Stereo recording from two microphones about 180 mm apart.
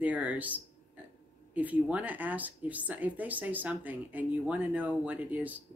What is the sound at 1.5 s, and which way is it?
Speech, 10° right (ahead or behind).